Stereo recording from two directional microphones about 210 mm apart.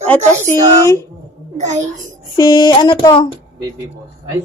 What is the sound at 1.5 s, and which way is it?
Speech, 35° right (ahead or behind).